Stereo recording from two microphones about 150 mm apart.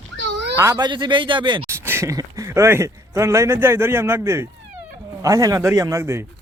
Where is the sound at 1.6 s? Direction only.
15° right (ahead or behind).